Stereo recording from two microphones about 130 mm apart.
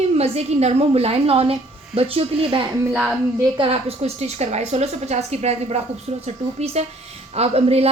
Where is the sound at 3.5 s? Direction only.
45° right (ahead or behind).